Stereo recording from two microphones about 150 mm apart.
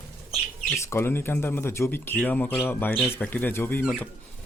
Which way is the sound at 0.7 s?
15° left (ahead or behind).